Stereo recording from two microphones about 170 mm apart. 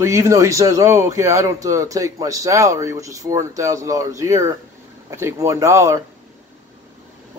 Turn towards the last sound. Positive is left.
turn(degrees=-20)  # may be behind; listen again after turning